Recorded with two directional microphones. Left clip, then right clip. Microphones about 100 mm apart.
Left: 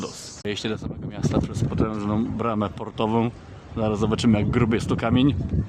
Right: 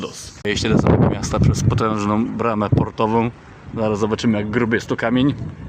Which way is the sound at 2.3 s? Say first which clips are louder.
Right 6 dB; centre (ahead or behind).